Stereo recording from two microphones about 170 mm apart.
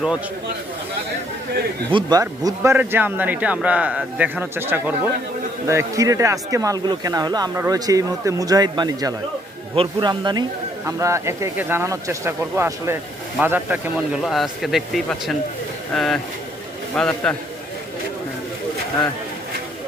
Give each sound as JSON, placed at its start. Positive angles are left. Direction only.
{"t": 1.9, "sound": "a man's voice", "side_deg": -25}